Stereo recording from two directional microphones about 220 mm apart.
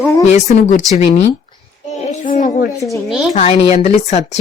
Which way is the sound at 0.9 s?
30° left (ahead or behind).